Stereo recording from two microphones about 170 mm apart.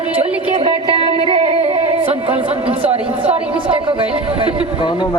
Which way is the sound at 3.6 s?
30° right (ahead or behind).